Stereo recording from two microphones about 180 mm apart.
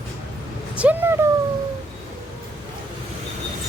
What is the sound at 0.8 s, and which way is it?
Speech, 10° right (ahead or behind).